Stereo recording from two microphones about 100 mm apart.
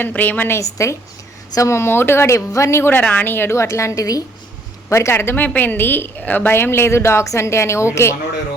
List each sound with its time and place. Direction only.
0.0 s a woman's voice: 15° left (ahead or behind)
3.0 s a woman's voice: 15° left (ahead or behind)